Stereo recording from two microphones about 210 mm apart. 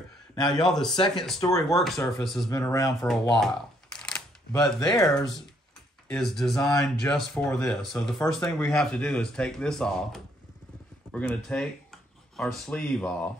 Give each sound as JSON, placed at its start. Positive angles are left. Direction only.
{"t": 0.5, "sound": "speech", "side_deg": 0}
{"t": 2.5, "sound": "speech", "side_deg": 15}
{"t": 3.0, "sound": "shuffling cards", "side_deg": 0}
{"t": 4.9, "sound": "speech", "side_deg": 0}